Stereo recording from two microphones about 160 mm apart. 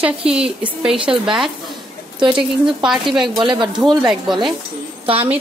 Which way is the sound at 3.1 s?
30° right (ahead or behind).